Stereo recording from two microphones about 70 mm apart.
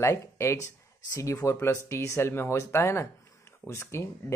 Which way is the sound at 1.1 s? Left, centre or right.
Left.